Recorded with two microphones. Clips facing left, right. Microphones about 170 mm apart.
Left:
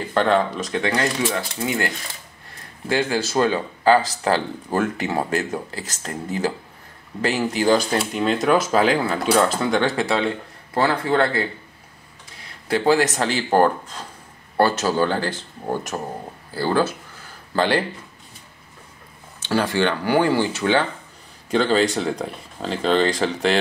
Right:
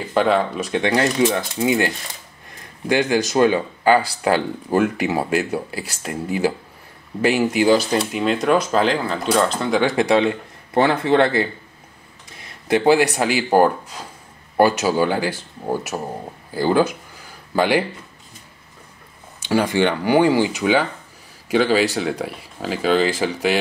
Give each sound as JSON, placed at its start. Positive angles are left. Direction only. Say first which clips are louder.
{"t": 0.1, "sound": "speech", "louder": "right 1 dB", "side_deg": -5}
{"t": 0.7, "sound": "speech", "louder": "right 4 dB", "side_deg": -25}
{"t": 2.9, "sound": "speech", "louder": "right 3 dB", "side_deg": -15}
{"t": 9.8, "sound": "speech", "louder": "right 6 dB", "side_deg": -15}
{"t": 12.6, "sound": "speech", "louder": "right 3 dB", "side_deg": -20}
{"t": 19.4, "sound": "speech", "louder": "right 2 dB", "side_deg": -15}